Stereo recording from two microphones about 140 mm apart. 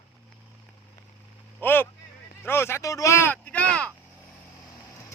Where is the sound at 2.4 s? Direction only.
20° left (ahead or behind).